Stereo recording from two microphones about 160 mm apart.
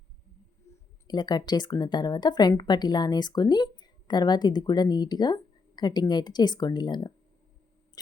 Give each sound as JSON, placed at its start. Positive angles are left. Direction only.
{"t": 1.0, "sound": "a woman's voice", "side_deg": 25}